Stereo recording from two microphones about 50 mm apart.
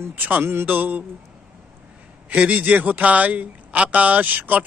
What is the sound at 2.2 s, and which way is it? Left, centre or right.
A man's voice, right.